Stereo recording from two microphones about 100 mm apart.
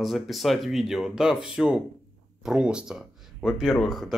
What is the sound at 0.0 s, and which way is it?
Speech, centre (ahead or behind).